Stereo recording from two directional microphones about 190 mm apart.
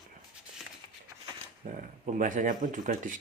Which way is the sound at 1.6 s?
45° right (ahead or behind).